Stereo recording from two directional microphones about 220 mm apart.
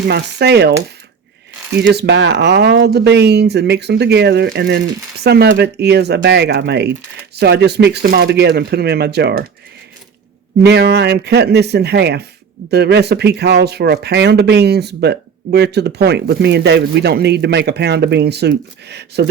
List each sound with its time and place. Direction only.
0.1 s speech: 50° right (ahead or behind)
1.8 s speech: 50° right (ahead or behind)
10.7 s speech: 50° right (ahead or behind)